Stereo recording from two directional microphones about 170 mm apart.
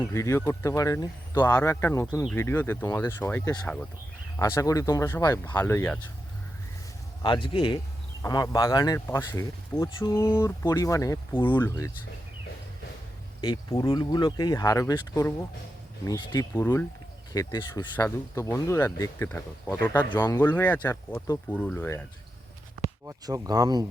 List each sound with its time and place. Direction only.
0.0 s speech: 15° left (ahead or behind)
7.2 s speech: 30° left (ahead or behind)
13.4 s speech: 25° left (ahead or behind)
23.0 s speech: 20° right (ahead or behind)